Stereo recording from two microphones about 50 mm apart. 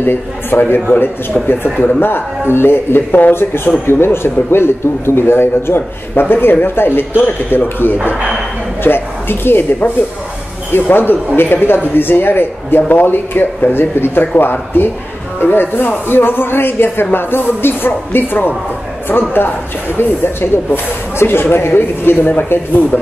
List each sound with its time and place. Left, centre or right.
0.0 s a man's voice: left
20.0 s a man's voice: left